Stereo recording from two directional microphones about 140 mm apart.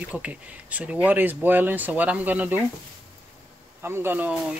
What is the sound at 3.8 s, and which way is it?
Speech, 15° right (ahead or behind).